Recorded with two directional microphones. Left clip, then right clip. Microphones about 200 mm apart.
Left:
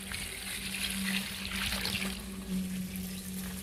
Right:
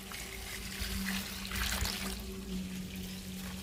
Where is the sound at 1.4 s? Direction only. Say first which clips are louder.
Even; 20° right (ahead or behind).